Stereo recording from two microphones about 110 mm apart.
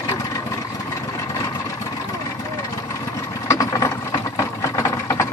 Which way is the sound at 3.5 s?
30° left (ahead or behind).